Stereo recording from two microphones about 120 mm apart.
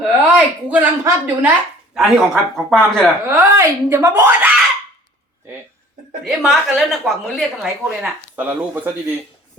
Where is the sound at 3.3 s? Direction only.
20° right (ahead or behind).